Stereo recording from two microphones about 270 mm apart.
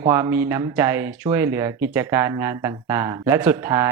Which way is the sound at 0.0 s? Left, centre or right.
Centre.